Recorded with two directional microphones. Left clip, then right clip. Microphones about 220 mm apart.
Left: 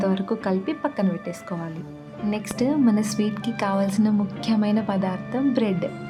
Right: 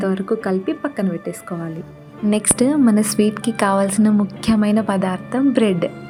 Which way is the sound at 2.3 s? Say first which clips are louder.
Right 7 dB; 15° right (ahead or behind).